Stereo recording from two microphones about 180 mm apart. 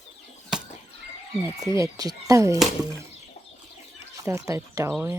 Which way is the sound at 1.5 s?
20° right (ahead or behind).